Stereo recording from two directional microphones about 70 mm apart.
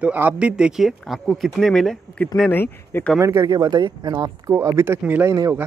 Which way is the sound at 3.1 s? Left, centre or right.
Right.